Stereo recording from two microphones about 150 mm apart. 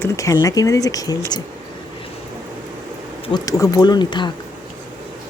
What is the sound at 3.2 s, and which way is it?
Speech, 25° left (ahead or behind).